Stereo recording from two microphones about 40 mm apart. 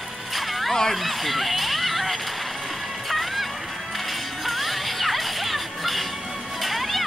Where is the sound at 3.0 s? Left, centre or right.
Centre.